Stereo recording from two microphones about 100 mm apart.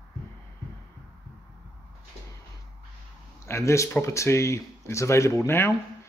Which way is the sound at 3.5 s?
30° left (ahead or behind).